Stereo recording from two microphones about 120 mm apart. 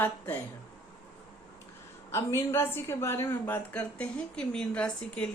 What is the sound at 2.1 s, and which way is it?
A woman's voice, 20° left (ahead or behind).